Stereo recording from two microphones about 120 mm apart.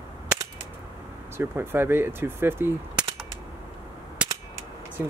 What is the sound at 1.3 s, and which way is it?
Speech, 20° right (ahead or behind).